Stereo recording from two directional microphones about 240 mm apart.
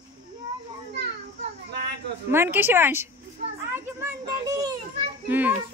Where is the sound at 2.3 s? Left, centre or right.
Centre.